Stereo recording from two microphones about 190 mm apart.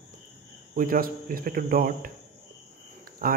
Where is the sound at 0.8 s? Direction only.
45° right (ahead or behind).